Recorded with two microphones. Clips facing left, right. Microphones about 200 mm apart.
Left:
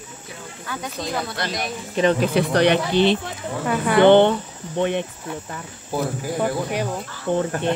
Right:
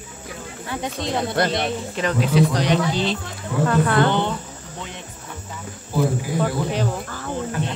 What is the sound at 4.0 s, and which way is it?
Speech, 65° left (ahead or behind).